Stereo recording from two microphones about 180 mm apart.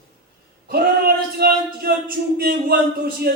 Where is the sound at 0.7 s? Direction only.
60° right (ahead or behind).